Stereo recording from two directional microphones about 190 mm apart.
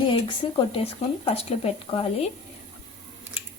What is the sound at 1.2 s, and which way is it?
Speech, 30° left (ahead or behind).